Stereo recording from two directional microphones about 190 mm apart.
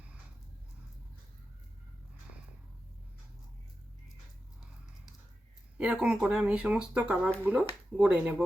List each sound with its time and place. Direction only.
5.7 s speech: 5° right (ahead or behind)